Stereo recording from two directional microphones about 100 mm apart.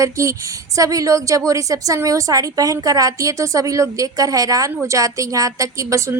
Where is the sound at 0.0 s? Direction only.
30° right (ahead or behind).